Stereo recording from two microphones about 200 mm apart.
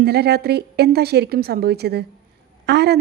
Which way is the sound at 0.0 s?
50° right (ahead or behind).